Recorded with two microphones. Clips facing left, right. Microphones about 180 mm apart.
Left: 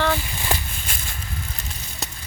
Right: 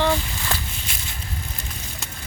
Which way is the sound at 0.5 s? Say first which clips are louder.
Left 3 dB; 15° left (ahead or behind).